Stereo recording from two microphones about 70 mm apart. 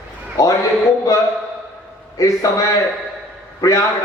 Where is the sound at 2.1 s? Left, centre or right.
Left.